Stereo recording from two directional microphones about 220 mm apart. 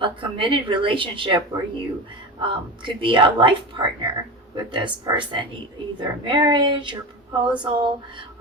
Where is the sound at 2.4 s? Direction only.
20° right (ahead or behind).